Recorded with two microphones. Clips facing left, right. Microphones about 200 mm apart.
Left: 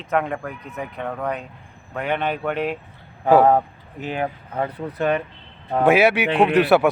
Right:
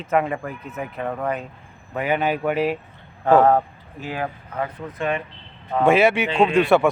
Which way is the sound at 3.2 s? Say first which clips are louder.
Left 1 dB; 10° left (ahead or behind).